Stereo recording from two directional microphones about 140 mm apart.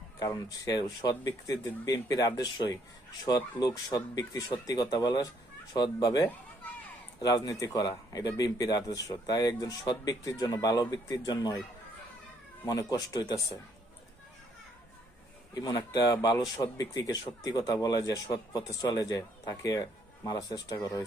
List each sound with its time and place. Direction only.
0.2 s speech: 25° left (ahead or behind)
12.6 s speech: 25° left (ahead or behind)
15.5 s speech: 30° left (ahead or behind)